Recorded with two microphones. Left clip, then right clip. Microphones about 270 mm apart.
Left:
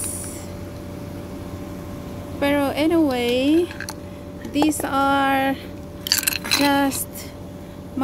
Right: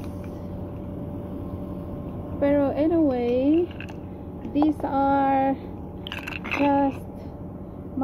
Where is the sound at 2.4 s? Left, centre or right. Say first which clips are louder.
Left 2 dB; left.